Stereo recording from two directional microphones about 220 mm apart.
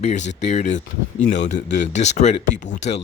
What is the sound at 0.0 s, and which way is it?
Speech, 30° left (ahead or behind).